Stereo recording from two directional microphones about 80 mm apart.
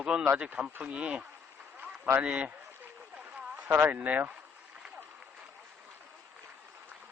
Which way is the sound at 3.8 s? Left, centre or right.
Centre.